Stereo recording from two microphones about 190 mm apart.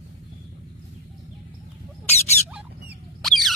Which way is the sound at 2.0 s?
35° left (ahead or behind).